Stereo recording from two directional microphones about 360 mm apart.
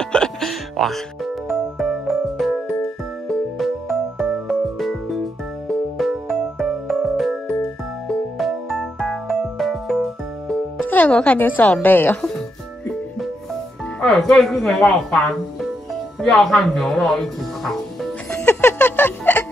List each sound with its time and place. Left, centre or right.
0.0 s music: centre
8.4 s music: centre
14.0 s speech: centre
16.2 s music: centre